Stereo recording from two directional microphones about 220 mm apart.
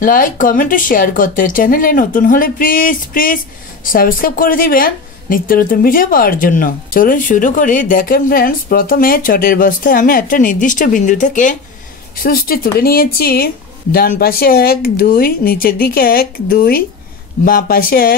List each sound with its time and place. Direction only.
0.0 s a woman's voice: 40° left (ahead or behind)